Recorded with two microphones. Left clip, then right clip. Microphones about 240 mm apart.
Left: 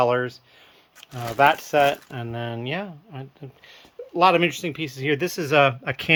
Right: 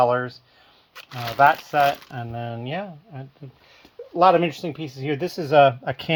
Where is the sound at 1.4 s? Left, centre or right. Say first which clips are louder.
Right 1 dB; centre.